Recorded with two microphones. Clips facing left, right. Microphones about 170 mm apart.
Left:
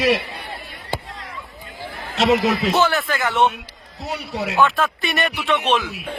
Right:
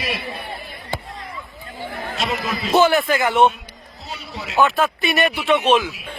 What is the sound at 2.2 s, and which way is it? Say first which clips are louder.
Speech: left 9 dB; 75° left (ahead or behind).